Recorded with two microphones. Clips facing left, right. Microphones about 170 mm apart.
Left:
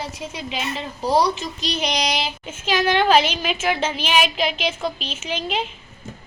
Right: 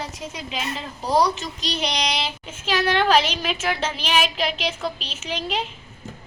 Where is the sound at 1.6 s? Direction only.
30° right (ahead or behind).